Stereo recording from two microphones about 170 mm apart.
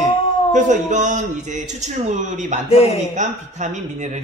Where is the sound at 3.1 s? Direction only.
45° right (ahead or behind).